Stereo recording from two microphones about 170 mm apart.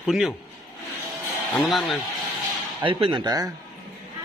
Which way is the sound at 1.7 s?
Centre (ahead or behind).